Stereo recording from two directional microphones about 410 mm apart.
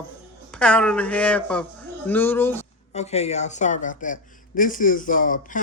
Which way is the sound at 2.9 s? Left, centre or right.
Centre.